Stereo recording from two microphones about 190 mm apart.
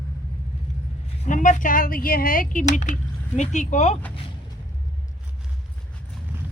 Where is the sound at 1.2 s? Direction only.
40° left (ahead or behind).